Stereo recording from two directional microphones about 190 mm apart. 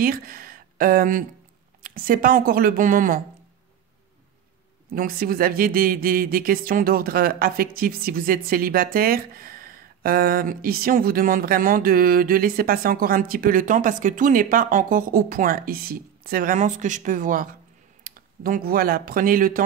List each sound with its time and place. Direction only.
0.0 s speech: 50° right (ahead or behind)
4.9 s speech: 50° right (ahead or behind)